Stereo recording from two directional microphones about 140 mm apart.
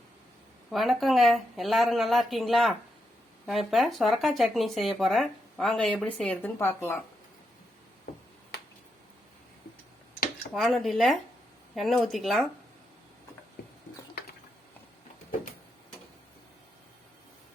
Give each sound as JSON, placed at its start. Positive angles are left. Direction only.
{"t": 0.7, "sound": "speech", "side_deg": 0}
{"t": 6.6, "sound": "speech", "side_deg": 15}
{"t": 10.5, "sound": "speech", "side_deg": 0}